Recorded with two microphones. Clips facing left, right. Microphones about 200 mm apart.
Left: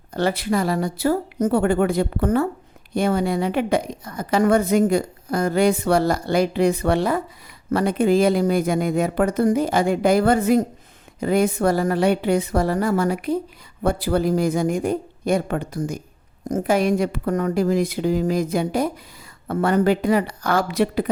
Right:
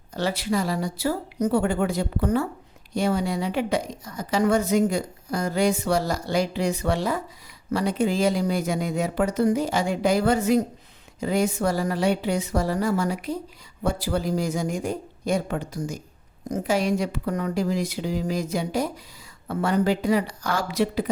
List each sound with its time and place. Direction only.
0.1 s a woman's voice: 55° left (ahead or behind)